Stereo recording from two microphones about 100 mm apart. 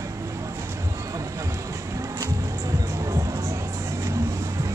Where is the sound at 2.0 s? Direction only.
35° right (ahead or behind).